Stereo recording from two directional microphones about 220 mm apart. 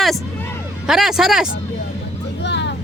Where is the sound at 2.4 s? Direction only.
50° left (ahead or behind).